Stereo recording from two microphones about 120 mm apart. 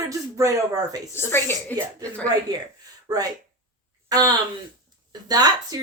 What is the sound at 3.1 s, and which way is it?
A woman's voice, 30° right (ahead or behind).